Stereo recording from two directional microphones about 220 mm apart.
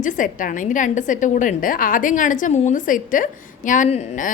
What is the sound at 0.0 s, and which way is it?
A woman's voice, 35° left (ahead or behind).